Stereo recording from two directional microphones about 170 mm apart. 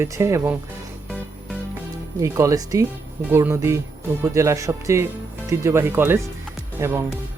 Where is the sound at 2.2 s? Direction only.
20° right (ahead or behind).